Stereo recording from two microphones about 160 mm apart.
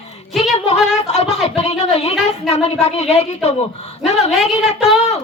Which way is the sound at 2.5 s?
40° left (ahead or behind).